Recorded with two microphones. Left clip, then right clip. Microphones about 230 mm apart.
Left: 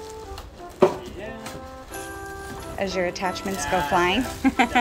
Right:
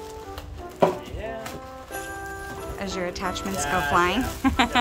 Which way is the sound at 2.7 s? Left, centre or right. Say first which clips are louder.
Left 6 dB; centre.